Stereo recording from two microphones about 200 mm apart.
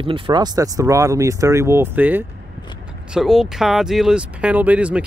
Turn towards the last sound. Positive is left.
turn(degrees=-5)  # may be behind; listen again after turning